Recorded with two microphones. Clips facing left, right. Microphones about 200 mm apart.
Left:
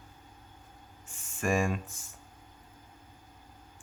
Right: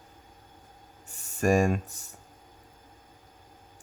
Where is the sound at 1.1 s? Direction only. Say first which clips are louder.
Right 6 dB; 40° right (ahead or behind).